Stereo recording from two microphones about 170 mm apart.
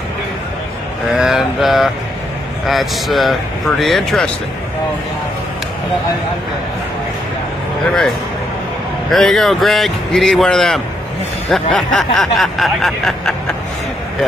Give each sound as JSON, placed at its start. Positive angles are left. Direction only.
{"t": 1.1, "sound": "speech", "side_deg": 0}
{"t": 2.6, "sound": "snicker", "side_deg": 0}
{"t": 9.1, "sound": "snicker", "side_deg": 0}